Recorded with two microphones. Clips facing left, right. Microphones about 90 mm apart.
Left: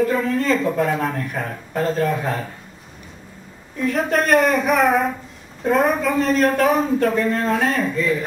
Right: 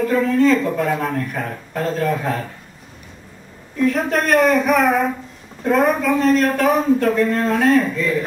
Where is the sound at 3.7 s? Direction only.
Centre (ahead or behind).